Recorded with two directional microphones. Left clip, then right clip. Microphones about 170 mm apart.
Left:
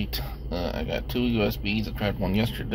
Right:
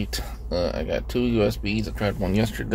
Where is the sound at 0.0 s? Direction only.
25° right (ahead or behind).